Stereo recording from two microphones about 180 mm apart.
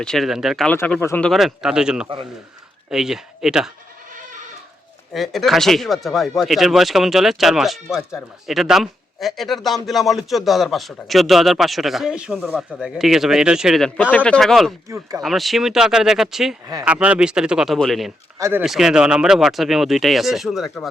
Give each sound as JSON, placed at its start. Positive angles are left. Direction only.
{"t": 0.0, "sound": "speech", "side_deg": 0}
{"t": 0.8, "sound": "speech", "side_deg": 10}
{"t": 5.1, "sound": "speech", "side_deg": 0}
{"t": 14.8, "sound": "speech", "side_deg": -15}
{"t": 15.2, "sound": "speech", "side_deg": 0}
{"t": 18.3, "sound": "speech", "side_deg": -15}
{"t": 18.6, "sound": "speech", "side_deg": 0}